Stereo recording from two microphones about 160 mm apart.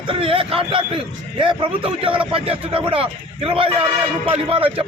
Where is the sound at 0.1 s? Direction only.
35° right (ahead or behind).